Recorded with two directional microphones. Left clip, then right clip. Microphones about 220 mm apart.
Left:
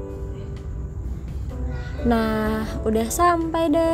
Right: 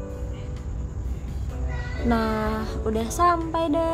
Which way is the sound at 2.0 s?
20° left (ahead or behind).